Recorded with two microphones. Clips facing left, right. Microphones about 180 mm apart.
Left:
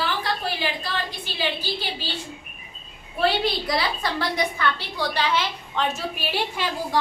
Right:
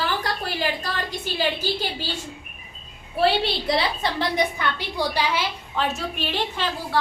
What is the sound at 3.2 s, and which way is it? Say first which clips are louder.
A woman's voice: right 2 dB; 25° right (ahead or behind).